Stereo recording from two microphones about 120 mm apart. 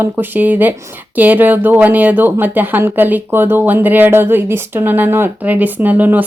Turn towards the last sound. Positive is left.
turn(degrees=-15)  # may be behind; listen again after turning